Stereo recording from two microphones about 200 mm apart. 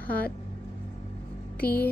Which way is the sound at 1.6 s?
10° left (ahead or behind).